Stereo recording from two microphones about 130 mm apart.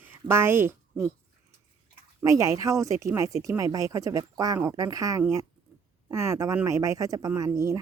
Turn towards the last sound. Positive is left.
turn(degrees=-25)  # may be behind; listen again after turning